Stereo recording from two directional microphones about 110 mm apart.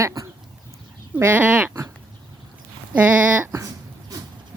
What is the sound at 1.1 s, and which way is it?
Speech, 15° right (ahead or behind).